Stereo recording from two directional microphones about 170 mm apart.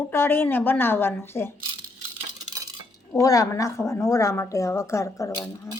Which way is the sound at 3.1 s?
20° left (ahead or behind).